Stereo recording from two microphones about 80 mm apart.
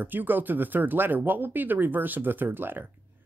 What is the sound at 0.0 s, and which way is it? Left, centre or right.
Speech, right.